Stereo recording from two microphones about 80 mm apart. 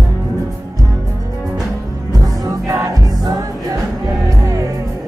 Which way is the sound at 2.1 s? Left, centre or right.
Right.